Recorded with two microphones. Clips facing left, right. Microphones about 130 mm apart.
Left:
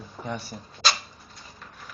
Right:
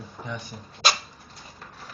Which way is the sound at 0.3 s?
35° left (ahead or behind).